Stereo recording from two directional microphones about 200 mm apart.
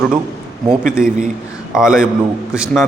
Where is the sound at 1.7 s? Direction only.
5° right (ahead or behind).